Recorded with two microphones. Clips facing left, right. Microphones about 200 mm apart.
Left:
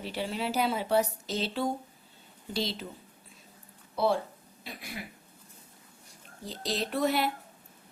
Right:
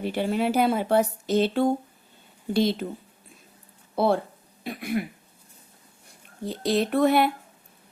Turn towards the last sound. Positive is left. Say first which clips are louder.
# right 8 dB
turn(degrees=-55)  # may be behind; listen again after turning